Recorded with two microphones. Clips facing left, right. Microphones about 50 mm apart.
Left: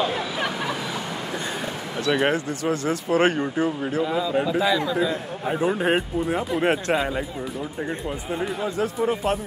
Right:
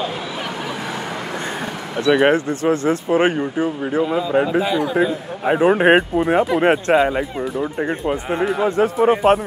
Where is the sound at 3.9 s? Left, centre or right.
Right.